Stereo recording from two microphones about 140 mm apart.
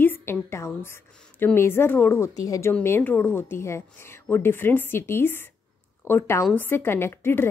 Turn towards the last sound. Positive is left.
turn(degrees=15)  # may be behind; listen again after turning